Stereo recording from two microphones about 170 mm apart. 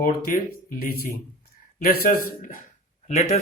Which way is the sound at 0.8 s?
60° left (ahead or behind).